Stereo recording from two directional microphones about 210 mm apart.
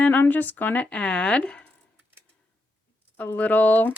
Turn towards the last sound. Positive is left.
turn(degrees=10)  # may be behind; listen again after turning